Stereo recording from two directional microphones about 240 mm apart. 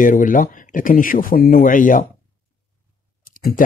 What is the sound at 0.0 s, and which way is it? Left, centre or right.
Speech, left.